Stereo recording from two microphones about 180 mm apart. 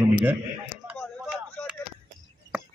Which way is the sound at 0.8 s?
5° right (ahead or behind).